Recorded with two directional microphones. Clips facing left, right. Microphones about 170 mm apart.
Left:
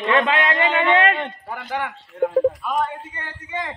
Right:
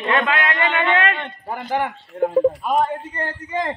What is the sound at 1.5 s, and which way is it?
A man's voice, 35° right (ahead or behind).